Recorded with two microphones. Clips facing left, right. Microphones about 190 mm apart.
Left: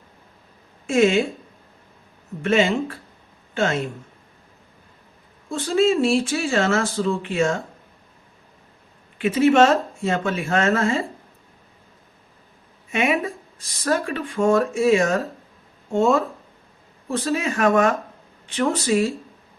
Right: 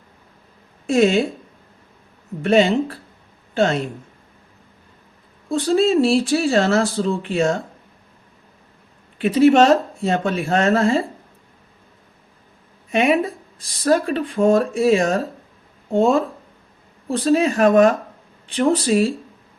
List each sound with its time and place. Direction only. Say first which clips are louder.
0.9 s speech: right 2 dB; 35° right (ahead or behind)
2.4 s a man's voice: right 4 dB; 35° right (ahead or behind)
5.5 s speech: right 2 dB; 35° right (ahead or behind)
9.1 s speech: right 3 dB; 35° right (ahead or behind)
12.9 s speech: right 4 dB; 35° right (ahead or behind)